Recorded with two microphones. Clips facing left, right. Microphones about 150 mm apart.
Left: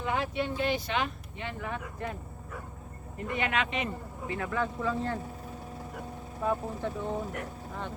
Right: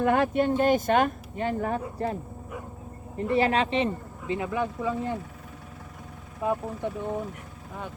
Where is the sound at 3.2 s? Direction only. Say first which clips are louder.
Right 7 dB; 35° right (ahead or behind).